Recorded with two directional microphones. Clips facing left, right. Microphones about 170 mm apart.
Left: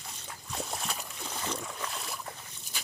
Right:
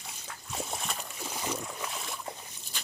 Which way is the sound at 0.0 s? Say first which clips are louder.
Even; 5° right (ahead or behind).